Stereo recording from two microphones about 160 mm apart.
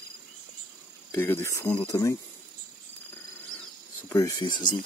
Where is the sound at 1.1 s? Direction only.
15° left (ahead or behind).